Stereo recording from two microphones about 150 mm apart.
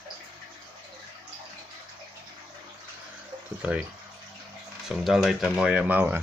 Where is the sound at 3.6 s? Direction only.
10° right (ahead or behind).